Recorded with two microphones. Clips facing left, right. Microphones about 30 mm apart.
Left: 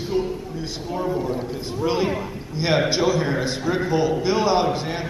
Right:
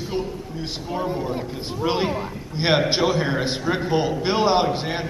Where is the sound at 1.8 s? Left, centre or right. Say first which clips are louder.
Even; right.